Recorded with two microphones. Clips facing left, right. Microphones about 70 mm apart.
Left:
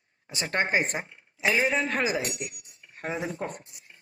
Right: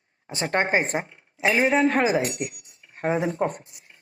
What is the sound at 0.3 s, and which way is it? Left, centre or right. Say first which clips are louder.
Speech: right 4 dB; right.